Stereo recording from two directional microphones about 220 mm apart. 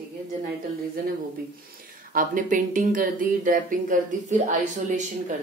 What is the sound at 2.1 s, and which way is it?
A woman's voice, 35° right (ahead or behind).